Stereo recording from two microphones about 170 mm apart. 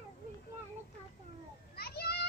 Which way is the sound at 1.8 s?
70° left (ahead or behind).